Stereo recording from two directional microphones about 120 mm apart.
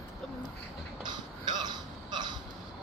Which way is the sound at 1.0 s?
35° right (ahead or behind).